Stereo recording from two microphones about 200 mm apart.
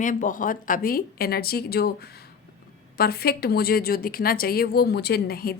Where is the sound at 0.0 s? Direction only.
40° left (ahead or behind).